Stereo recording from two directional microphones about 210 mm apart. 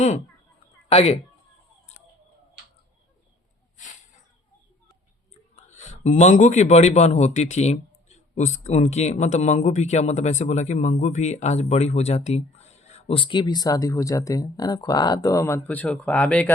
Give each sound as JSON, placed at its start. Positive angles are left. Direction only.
{"t": 0.9, "sound": "speech", "side_deg": 30}
{"t": 5.5, "sound": "speech", "side_deg": 35}